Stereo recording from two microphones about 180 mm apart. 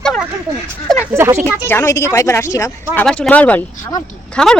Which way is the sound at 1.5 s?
15° left (ahead or behind).